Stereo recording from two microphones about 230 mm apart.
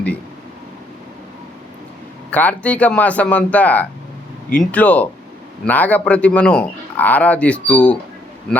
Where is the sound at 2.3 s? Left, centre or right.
Centre.